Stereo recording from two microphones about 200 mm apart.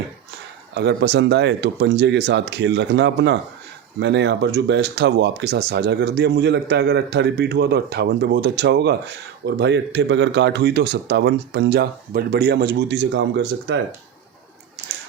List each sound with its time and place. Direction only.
0.7 s speech: 60° right (ahead or behind)